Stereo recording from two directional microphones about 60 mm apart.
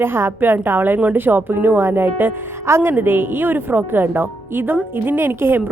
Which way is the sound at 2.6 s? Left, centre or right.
Right.